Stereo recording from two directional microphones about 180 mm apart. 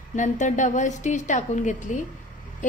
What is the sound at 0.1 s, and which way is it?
A woman's voice, 45° left (ahead or behind).